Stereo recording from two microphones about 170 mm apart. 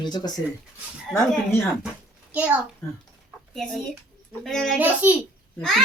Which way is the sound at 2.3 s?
10° right (ahead or behind).